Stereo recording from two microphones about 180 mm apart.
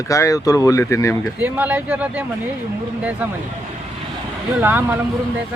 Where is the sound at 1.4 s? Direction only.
10° right (ahead or behind).